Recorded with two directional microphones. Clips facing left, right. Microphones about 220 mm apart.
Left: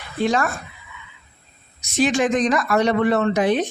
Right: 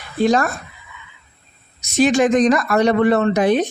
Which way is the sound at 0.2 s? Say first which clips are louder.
Right 4 dB; 40° right (ahead or behind).